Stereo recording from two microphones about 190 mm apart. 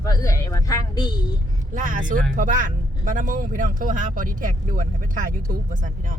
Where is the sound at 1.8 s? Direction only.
45° right (ahead or behind).